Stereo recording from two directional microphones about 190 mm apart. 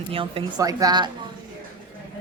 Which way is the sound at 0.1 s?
30° right (ahead or behind).